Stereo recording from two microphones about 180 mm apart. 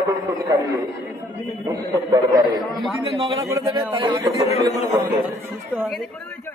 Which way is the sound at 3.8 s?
20° right (ahead or behind).